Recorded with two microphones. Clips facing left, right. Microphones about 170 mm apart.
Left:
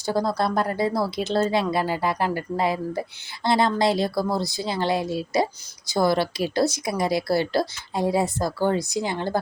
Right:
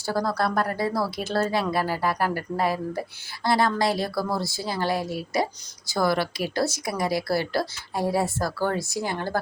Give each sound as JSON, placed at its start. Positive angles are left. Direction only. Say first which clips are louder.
{"t": 0.0, "sound": "a woman's voice", "louder": "left 2 dB", "side_deg": 20}